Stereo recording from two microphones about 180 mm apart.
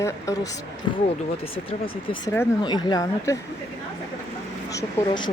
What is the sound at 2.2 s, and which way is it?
Speech, 15° left (ahead or behind).